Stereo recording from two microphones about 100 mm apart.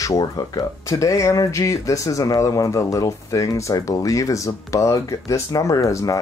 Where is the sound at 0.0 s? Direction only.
35° left (ahead or behind).